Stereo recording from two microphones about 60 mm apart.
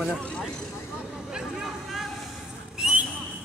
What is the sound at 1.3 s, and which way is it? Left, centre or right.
Vehicle, centre.